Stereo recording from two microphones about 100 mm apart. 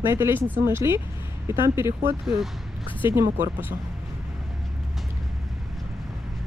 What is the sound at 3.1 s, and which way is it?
Speech, 20° right (ahead or behind).